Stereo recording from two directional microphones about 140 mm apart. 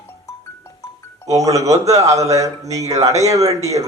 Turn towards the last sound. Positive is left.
turn(degrees=-25)  # may be behind; listen again after turning